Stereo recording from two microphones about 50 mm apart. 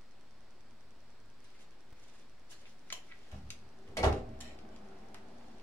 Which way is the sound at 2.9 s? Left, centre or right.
Left.